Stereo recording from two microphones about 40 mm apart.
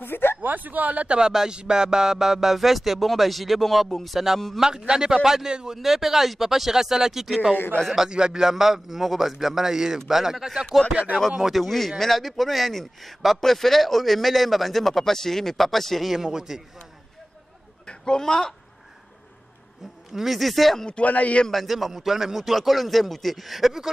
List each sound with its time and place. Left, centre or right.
0.0 s a sound: left
0.4 s speech: right
1.5 s a man's voice: right; by 4.4 s centre
4.6 s a man's voice: centre
5.8 s a man's voice: centre
8.1 s a man's voice: right; by 16.1 s centre
16.1 s a man's voice: centre
17.8 s a man's voice: centre
20.2 s a man's voice: centre
21.0 s speech: left
21.5 s a man's voice: centre